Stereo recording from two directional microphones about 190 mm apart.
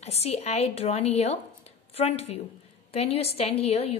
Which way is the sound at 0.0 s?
35° left (ahead or behind).